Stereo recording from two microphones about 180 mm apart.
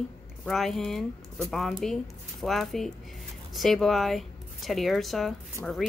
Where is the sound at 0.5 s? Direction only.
Centre (ahead or behind).